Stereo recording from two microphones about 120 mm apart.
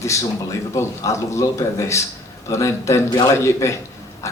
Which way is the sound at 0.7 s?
25° left (ahead or behind).